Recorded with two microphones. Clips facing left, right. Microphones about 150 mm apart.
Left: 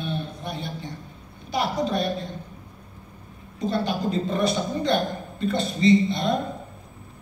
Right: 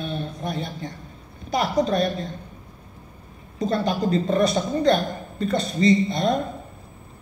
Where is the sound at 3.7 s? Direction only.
40° right (ahead or behind).